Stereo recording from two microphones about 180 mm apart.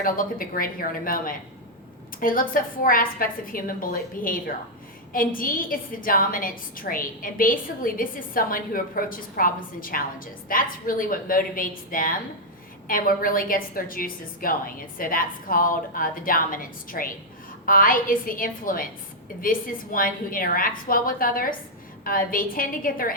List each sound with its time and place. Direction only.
0.0 s a woman's voice: 50° left (ahead or behind)